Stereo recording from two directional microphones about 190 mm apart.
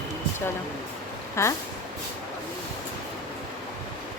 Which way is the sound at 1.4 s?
15° left (ahead or behind).